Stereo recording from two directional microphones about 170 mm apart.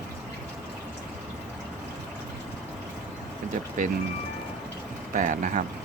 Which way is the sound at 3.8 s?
50° right (ahead or behind).